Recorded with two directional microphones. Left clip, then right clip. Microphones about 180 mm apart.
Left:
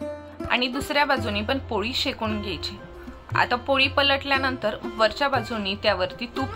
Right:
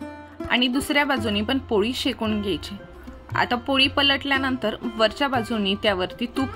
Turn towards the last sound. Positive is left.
turn(degrees=-45)  # may be behind; listen again after turning